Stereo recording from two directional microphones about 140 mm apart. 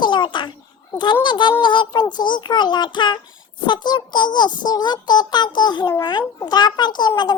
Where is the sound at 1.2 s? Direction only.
35° left (ahead or behind).